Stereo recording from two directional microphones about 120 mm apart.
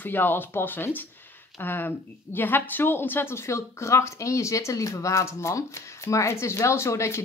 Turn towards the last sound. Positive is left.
turn(degrees=25)  # may be behind; listen again after turning